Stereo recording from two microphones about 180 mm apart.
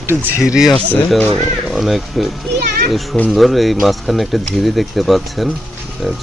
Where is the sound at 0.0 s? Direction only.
10° right (ahead or behind).